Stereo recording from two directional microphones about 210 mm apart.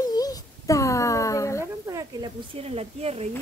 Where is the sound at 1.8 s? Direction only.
15° right (ahead or behind).